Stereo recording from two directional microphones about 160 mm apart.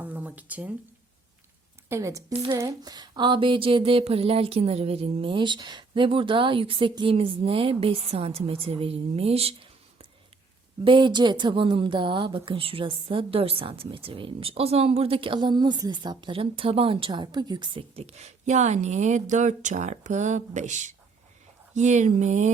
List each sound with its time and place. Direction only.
0.0 s a sound: 10° right (ahead or behind)
1.9 s a woman's voice: 20° right (ahead or behind)
2.3 s a woman's voice: 35° right (ahead or behind)
2.6 s a woman's voice: 25° right (ahead or behind); by 22.5 s 50° right (ahead or behind)